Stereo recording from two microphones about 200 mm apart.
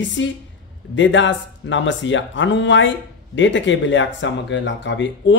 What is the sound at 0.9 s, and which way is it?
Speech, 70° left (ahead or behind).